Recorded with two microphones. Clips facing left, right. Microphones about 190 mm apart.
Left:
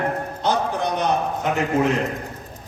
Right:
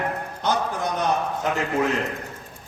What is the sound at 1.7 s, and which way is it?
Speech, 20° left (ahead or behind).